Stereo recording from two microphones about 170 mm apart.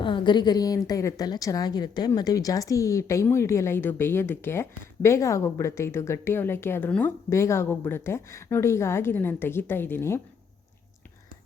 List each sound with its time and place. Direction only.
0.0 s a woman's voice: 30° left (ahead or behind)